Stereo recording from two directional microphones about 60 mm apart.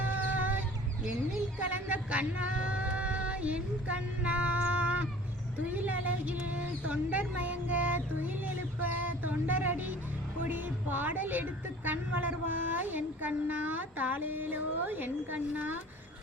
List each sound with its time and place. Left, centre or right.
0.3 s chicken: right
1.7 s a woman's voice: right